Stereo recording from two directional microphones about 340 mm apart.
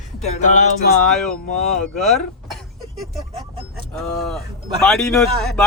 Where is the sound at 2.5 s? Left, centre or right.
Centre.